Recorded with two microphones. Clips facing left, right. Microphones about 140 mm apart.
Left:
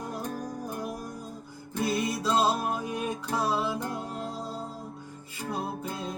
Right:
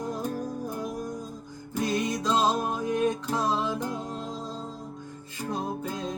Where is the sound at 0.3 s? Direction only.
10° left (ahead or behind).